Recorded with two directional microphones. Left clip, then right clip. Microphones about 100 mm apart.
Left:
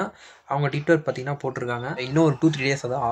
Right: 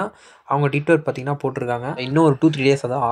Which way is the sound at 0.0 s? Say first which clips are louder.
Right 3 dB; 45° right (ahead or behind).